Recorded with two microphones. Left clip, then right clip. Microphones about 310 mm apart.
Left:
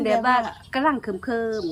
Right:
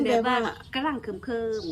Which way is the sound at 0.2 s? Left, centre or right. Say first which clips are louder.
Left 4 dB; centre.